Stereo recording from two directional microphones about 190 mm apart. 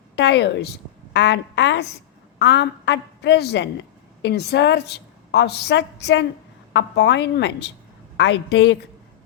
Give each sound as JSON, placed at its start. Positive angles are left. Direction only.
{"t": 0.2, "sound": "a woman's voice", "side_deg": 65}